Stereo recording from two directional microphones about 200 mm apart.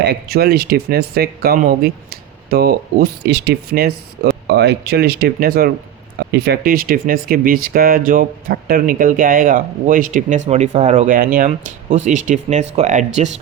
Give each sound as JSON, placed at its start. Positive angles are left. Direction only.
{"t": 0.0, "sound": "speech", "side_deg": -55}